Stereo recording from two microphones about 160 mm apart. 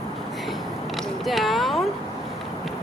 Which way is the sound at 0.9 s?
Centre (ahead or behind).